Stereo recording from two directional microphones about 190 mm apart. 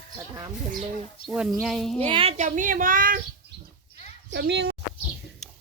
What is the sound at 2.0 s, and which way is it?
Speech, 30° right (ahead or behind).